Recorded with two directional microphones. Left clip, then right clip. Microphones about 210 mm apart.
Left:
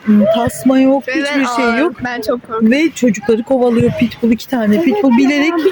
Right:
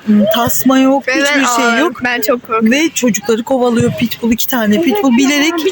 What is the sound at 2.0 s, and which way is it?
Speech, 15° right (ahead or behind).